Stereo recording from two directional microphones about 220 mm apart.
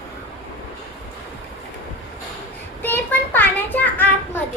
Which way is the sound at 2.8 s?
10° left (ahead or behind).